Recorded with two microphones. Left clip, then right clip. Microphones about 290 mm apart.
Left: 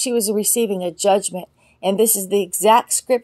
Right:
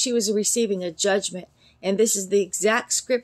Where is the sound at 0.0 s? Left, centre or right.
Centre.